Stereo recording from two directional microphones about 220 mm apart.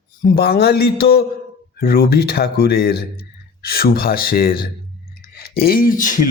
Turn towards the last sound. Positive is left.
turn(degrees=40)  # may be behind; listen again after turning